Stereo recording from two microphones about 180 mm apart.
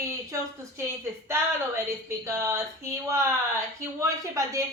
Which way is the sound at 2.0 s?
15° right (ahead or behind).